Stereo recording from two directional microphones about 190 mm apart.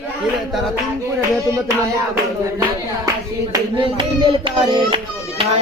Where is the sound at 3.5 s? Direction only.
25° right (ahead or behind).